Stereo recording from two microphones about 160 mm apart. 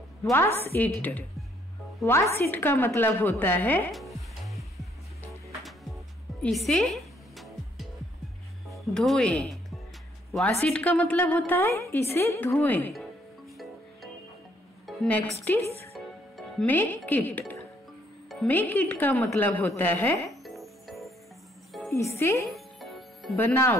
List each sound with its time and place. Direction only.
0.2 s a woman's voice: 15° left (ahead or behind)
3.9 s music: centre (ahead or behind)
8.6 s a woman's voice: centre (ahead or behind)
14.9 s music: centre (ahead or behind)
15.5 s a woman's voice: 10° left (ahead or behind)
20.4 s music: centre (ahead or behind)
21.9 s a woman's voice: 15° left (ahead or behind)
22.5 s music: centre (ahead or behind)
23.3 s a woman's voice: 15° left (ahead or behind)